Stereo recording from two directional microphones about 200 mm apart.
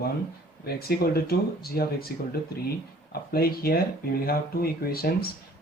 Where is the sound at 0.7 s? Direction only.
50° left (ahead or behind).